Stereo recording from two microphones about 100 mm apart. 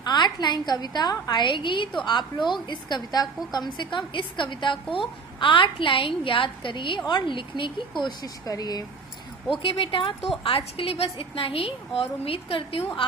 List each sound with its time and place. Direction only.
0.0 s a woman's voice: 45° left (ahead or behind)
8.2 s speech: 40° left (ahead or behind)
9.5 s speech: 60° left (ahead or behind)
10.8 s a woman's voice: 80° left; by 13.1 s 65° left (ahead or behind)